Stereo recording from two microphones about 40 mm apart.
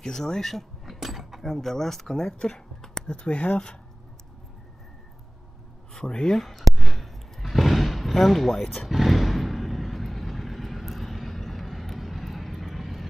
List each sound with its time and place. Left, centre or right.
0.0 s speech: centre
0.9 s speech: centre; by 3.7 s left
5.9 s speech: centre
6.8 s a sound: centre
8.8 s vehicle: centre